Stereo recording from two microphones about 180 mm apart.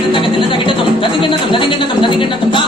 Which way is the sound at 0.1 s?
30° left (ahead or behind).